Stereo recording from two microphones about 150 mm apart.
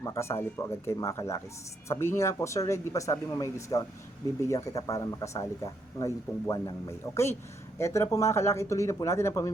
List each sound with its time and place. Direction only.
0.0 s speech: 20° left (ahead or behind)